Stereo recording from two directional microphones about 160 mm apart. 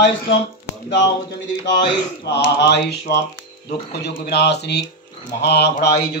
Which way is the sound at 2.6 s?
90° left.